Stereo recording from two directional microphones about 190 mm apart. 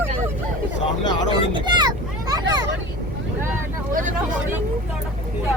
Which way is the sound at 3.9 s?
45° right (ahead or behind).